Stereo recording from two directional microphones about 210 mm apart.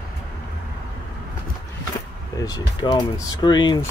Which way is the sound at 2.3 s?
15° left (ahead or behind).